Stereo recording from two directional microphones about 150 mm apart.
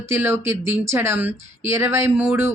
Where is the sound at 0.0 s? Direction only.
15° right (ahead or behind).